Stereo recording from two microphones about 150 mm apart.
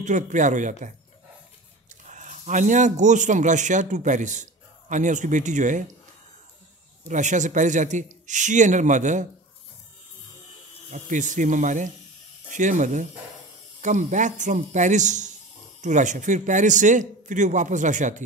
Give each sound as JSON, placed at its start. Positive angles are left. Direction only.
{"t": 0.0, "sound": "a man's voice", "side_deg": -55}
{"t": 2.0, "sound": "a man's voice", "side_deg": -55}
{"t": 7.1, "sound": "a man's voice", "side_deg": -55}
{"t": 10.9, "sound": "a man's voice", "side_deg": -55}